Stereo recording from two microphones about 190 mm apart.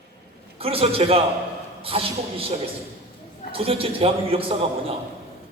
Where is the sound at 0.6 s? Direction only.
30° right (ahead or behind).